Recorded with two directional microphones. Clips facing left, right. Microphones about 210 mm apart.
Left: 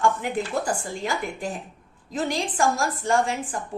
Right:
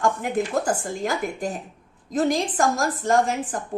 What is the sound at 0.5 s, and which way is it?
A woman's voice, 40° right (ahead or behind).